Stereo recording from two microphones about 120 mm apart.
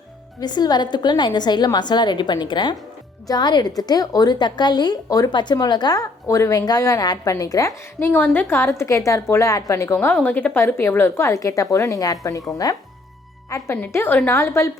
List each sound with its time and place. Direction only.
0.3 s a woman's voice: 35° left (ahead or behind)
7.9 s speech: 15° left (ahead or behind)